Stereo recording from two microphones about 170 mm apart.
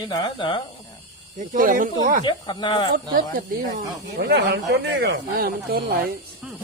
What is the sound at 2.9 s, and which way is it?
Speech, 60° right (ahead or behind).